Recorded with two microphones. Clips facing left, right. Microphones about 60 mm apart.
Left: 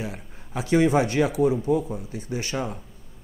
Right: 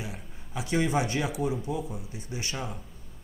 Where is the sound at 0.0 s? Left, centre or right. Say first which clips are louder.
Left 6 dB; left.